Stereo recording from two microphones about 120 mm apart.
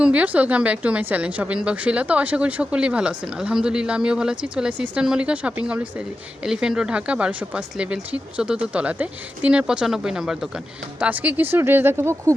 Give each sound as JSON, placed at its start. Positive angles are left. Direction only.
{"t": 0.0, "sound": "a woman's voice", "side_deg": -10}